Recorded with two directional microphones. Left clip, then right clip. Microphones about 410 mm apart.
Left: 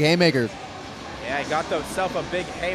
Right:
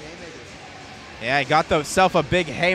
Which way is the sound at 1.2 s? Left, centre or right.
Right.